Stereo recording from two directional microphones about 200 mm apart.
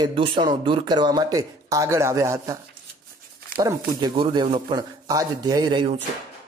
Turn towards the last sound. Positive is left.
turn(degrees=-25)  # may be behind; listen again after turning